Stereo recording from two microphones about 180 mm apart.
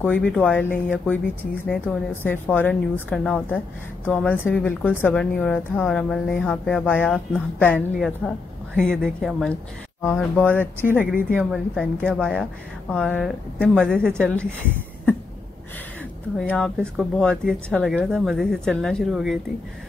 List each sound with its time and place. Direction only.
0.0 s a woman's voice: 5° left (ahead or behind)
10.6 s speech: 10° right (ahead or behind)
11.3 s speech: centre (ahead or behind)
16.3 s speech: 5° left (ahead or behind)